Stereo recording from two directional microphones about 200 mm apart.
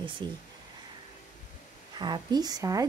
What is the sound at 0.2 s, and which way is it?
Speech, 20° right (ahead or behind).